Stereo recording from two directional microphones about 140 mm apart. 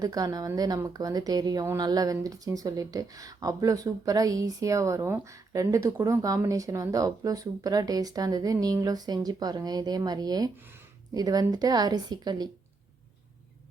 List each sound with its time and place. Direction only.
0.0 s speech: 25° right (ahead or behind)